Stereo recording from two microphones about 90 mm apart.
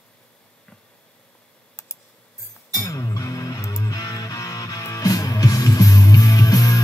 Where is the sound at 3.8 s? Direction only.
45° left (ahead or behind).